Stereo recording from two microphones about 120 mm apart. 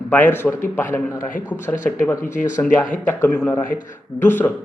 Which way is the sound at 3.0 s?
15° left (ahead or behind).